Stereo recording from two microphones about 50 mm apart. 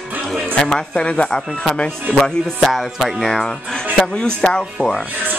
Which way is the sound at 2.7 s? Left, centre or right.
Centre.